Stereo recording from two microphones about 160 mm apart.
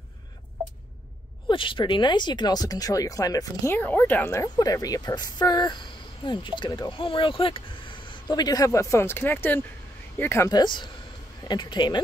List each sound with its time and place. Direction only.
1.5 s speech: 30° left (ahead or behind)